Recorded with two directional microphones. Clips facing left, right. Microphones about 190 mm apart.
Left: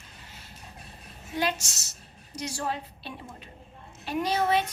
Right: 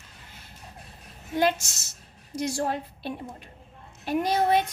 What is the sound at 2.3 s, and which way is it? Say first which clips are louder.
A woman's voice: right 5 dB; 50° right (ahead or behind).